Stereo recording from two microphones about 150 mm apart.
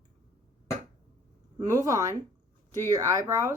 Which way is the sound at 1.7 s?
20° right (ahead or behind).